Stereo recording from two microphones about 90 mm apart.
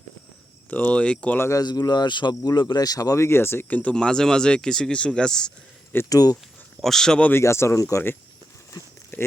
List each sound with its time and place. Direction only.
0.7 s speech: 15° left (ahead or behind)
1.4 s speech: 30° left (ahead or behind)
1.6 s speech: 50° left (ahead or behind); by 5.5 s 10° left (ahead or behind)
6.1 s speech: 45° left (ahead or behind)
6.8 s speech: 5° left (ahead or behind)
7.3 s speech: 30° left (ahead or behind)
9.1 s a sound: 20° left (ahead or behind)